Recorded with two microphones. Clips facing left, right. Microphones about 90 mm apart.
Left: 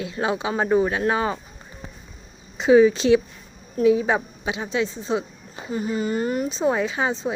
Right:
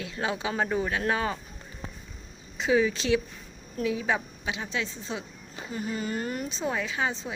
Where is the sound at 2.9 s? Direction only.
25° left (ahead or behind).